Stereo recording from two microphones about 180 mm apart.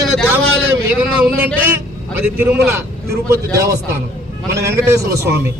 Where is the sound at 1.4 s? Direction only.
10° right (ahead or behind).